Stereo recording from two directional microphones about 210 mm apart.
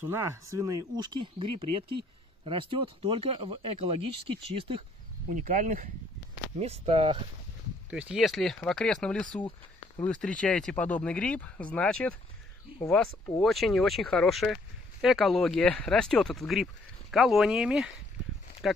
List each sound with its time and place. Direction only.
0.0 s speech: 10° right (ahead or behind)
5.3 s speech: 40° right (ahead or behind)
7.9 s speech: 5° right (ahead or behind)
13.4 s speech: centre (ahead or behind)